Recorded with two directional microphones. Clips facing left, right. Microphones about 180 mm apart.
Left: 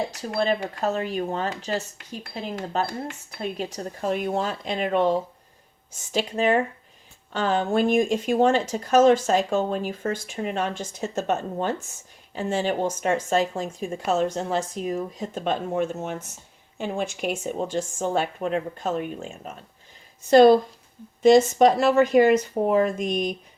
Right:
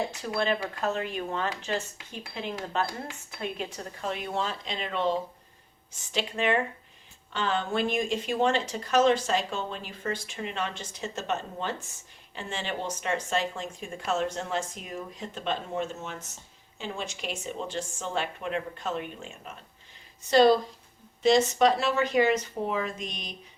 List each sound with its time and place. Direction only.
0.3 s speech: 40° left (ahead or behind)